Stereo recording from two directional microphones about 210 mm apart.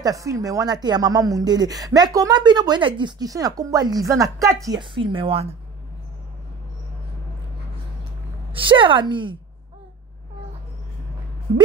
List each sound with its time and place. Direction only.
0.0 s speech: 15° right (ahead or behind)
8.5 s speech: 25° right (ahead or behind)